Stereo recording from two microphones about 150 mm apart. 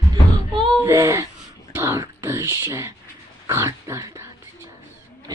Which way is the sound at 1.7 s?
20° right (ahead or behind).